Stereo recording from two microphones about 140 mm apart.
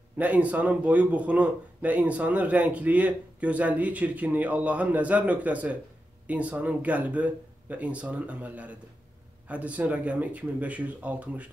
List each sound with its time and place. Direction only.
0.2 s speech: 10° right (ahead or behind)